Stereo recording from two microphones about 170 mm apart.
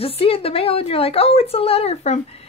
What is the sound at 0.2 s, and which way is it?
Speech, 35° left (ahead or behind).